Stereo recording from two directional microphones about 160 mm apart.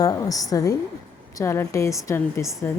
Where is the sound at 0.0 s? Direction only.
20° left (ahead or behind).